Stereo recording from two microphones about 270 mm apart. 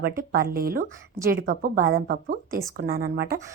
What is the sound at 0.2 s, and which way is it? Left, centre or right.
A woman's voice, right.